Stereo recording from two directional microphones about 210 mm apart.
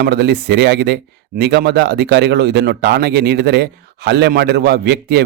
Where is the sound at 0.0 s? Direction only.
50° right (ahead or behind).